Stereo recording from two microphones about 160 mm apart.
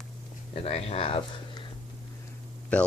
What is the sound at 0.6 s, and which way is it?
Speech, 40° left (ahead or behind).